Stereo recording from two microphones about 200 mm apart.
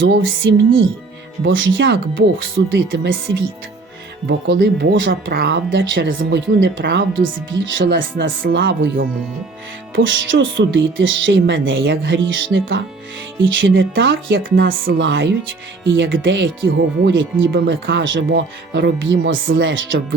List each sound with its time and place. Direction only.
0.0 s speech: 75° right (ahead or behind)
4.3 s speech: 60° right (ahead or behind)
5.2 s speech: 50° right (ahead or behind); by 14.4 s 70° right (ahead or behind)
14.5 s speech: 45° right (ahead or behind)
14.9 s speech: 70° right (ahead or behind)